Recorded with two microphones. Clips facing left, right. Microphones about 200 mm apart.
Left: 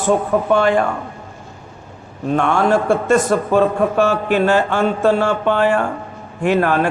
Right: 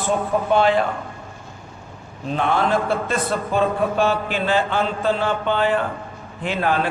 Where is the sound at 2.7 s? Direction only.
45° left (ahead or behind).